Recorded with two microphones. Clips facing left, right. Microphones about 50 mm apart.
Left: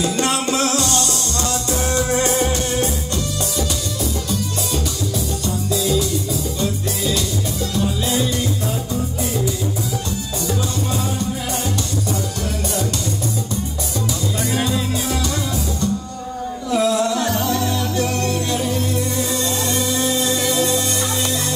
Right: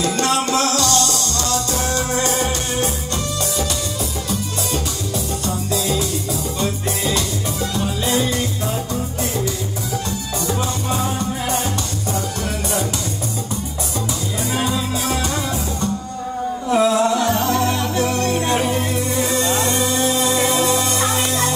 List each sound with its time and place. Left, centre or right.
0.7 s music: left
2.3 s music: right
5.7 s music: right
14.5 s music: right
16.7 s music: right